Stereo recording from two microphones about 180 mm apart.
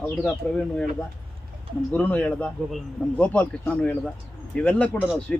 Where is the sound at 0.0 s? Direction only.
5° left (ahead or behind).